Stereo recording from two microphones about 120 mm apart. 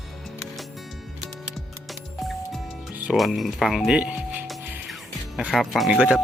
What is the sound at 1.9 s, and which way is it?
Music, centre (ahead or behind).